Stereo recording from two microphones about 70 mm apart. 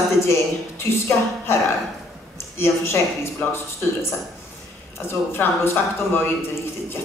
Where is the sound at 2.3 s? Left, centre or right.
Left.